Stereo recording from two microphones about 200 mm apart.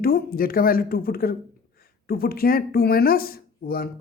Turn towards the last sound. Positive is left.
turn(degrees=50)  # may be behind; listen again after turning